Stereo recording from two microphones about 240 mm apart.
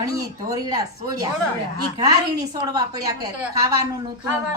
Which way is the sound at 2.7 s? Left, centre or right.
Centre.